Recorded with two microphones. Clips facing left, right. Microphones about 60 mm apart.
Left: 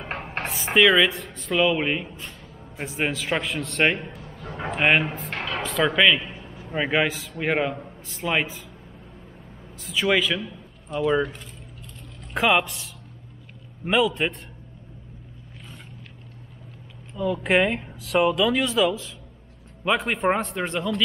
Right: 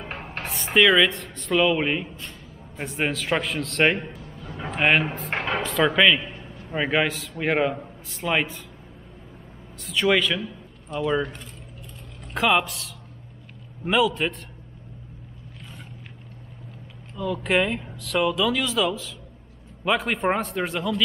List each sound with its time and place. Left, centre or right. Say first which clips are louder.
0.4 s speech: left 1 dB; centre
5.3 s music: right 7 dB; right
5.6 s a man's voice: even; centre
9.8 s speech: right 1 dB; centre
12.4 s speech: even; centre
17.1 s speech: left 2 dB; centre